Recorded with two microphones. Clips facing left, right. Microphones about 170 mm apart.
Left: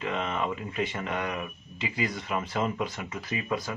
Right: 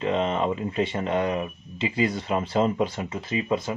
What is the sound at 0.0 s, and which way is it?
Speech, 30° right (ahead or behind).